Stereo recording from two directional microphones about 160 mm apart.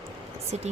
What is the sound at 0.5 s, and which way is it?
Speech, 40° right (ahead or behind).